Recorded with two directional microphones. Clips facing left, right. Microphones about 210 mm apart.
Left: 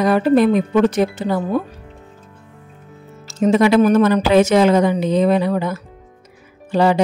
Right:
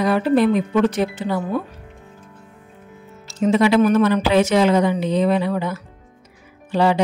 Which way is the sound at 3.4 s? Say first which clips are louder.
Left 2 dB; 45° left (ahead or behind).